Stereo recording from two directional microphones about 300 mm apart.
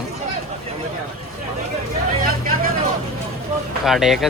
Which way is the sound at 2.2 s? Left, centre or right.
Right.